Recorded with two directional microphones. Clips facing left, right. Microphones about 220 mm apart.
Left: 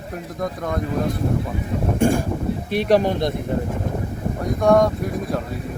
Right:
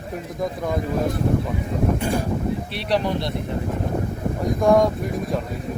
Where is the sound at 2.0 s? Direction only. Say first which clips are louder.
Left 6 dB; 45° left (ahead or behind).